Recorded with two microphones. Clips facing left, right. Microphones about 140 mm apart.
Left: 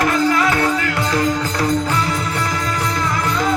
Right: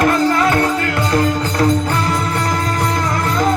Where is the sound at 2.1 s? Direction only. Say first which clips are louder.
Right 3 dB; 45° right (ahead or behind).